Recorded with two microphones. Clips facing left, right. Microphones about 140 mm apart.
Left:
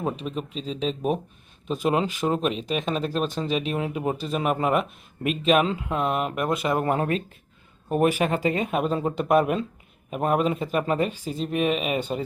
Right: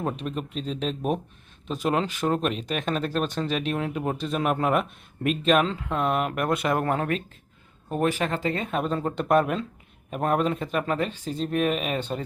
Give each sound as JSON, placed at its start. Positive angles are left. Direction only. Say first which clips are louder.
{"t": 0.0, "sound": "speech", "louder": "left 1 dB", "side_deg": 0}
{"t": 6.8, "sound": "speech", "louder": "left 2 dB", "side_deg": 15}